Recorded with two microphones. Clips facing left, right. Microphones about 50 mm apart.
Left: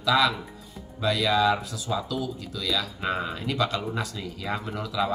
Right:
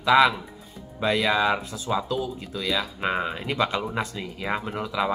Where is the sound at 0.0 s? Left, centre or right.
Right.